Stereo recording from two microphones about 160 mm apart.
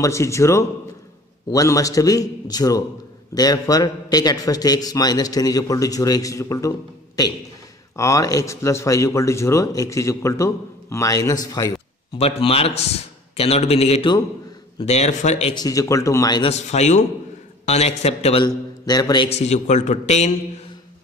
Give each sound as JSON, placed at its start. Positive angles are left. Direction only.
{"t": 0.0, "sound": "a man's voice", "side_deg": 20}
{"t": 12.2, "sound": "a man's voice", "side_deg": 40}
{"t": 15.5, "sound": "a man's voice", "side_deg": 20}
{"t": 16.4, "sound": "a man's voice", "side_deg": 45}
{"t": 18.4, "sound": "a man's voice", "side_deg": 25}
{"t": 19.2, "sound": "a man's voice", "side_deg": 40}